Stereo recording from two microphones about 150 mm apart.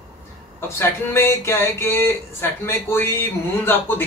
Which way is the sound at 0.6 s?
15° left (ahead or behind).